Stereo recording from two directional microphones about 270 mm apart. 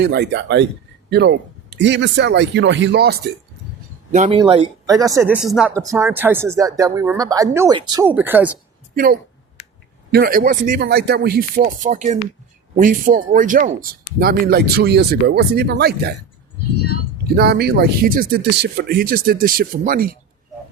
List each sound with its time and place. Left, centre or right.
0.0 s speech: right
4.1 s speech: right; by 8.5 s centre
10.1 s speech: right
17.2 s speech: right